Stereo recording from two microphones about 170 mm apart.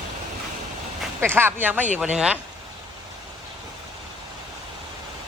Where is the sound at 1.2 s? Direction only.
15° right (ahead or behind).